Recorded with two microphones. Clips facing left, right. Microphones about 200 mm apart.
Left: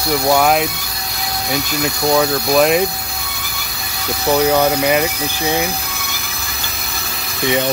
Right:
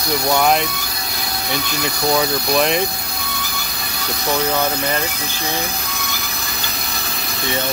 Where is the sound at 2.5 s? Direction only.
5° left (ahead or behind).